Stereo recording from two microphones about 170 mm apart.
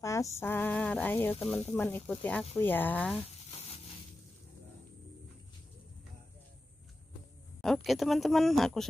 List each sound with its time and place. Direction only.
0.0 s speech: 15° left (ahead or behind)
3.3 s a sound: 40° left (ahead or behind)
7.6 s speech: centre (ahead or behind)